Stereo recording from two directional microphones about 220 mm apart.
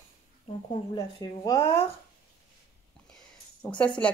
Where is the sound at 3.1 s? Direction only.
5° left (ahead or behind).